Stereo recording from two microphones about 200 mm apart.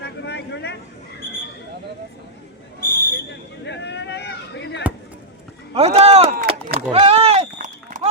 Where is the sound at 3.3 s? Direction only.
60° left (ahead or behind).